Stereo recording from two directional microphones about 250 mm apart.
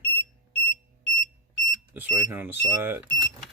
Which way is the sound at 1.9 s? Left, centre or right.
Centre.